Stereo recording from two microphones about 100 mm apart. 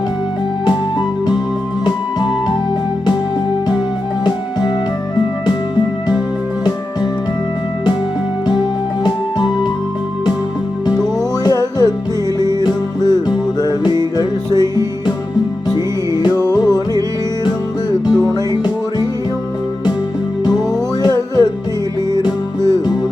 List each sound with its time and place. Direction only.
0.6 s music: 50° left (ahead or behind)
4.2 s music: 45° left (ahead or behind)
11.4 s music: 40° left (ahead or behind)
16.6 s music: 40° left (ahead or behind)
18.0 s music: 45° left (ahead or behind)
21.0 s music: 45° left (ahead or behind)